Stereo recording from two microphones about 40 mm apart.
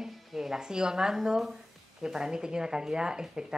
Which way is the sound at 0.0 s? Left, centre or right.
Centre.